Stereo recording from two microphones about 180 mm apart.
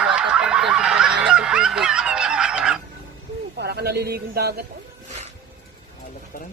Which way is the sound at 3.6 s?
65° right (ahead or behind).